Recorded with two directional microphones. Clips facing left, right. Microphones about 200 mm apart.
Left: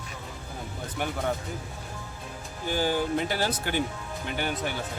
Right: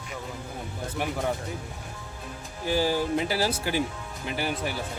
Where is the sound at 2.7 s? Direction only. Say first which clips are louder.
Right 2 dB; 5° right (ahead or behind).